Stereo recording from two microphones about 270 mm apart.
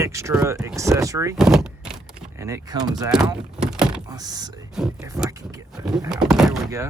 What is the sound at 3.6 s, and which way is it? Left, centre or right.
Door, centre.